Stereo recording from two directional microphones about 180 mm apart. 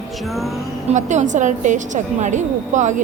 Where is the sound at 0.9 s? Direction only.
40° right (ahead or behind).